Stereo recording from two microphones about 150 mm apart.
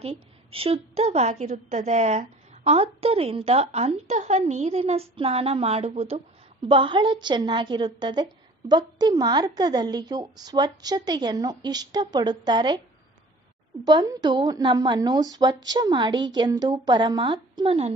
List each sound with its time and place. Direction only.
0.0 s a woman's voice: 40° right (ahead or behind)
13.8 s a woman's voice: 25° right (ahead or behind); by 17.9 s 40° right (ahead or behind)